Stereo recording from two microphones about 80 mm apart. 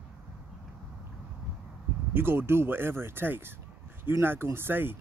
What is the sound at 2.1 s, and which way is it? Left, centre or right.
Speech, right.